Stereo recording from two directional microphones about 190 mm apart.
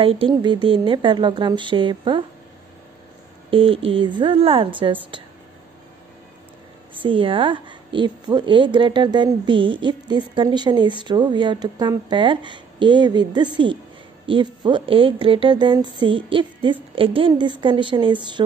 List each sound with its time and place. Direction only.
0.0 s a woman's voice: 30° right (ahead or behind)
3.4 s a woman's voice: 30° right (ahead or behind)
7.0 s a woman's voice: 25° right (ahead or behind)